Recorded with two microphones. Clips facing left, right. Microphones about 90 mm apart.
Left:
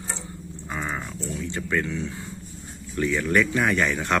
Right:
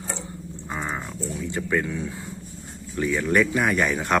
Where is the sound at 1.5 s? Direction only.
10° right (ahead or behind).